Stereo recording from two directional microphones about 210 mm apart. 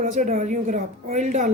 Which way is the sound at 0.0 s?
35° right (ahead or behind).